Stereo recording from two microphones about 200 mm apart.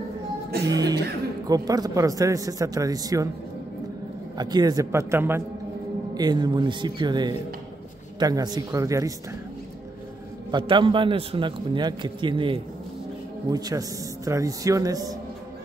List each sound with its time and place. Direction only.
0.7 s a man's voice: 20° right (ahead or behind)
4.4 s a man's voice: 20° right (ahead or behind)
10.5 s a man's voice: 25° right (ahead or behind)